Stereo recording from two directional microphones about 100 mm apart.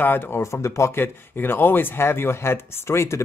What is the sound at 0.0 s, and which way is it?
Speech, 20° left (ahead or behind).